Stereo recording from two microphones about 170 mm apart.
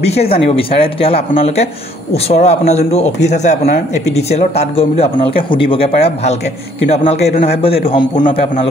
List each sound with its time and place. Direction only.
0.0 s speech: 35° left (ahead or behind)